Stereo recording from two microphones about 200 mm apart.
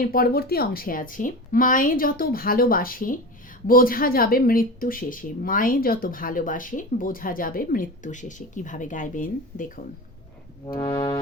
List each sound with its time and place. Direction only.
0.0 s speech: 45° left (ahead or behind)
10.8 s music: 25° left (ahead or behind)